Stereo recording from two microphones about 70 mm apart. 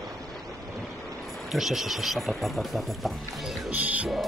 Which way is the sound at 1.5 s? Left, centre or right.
Centre.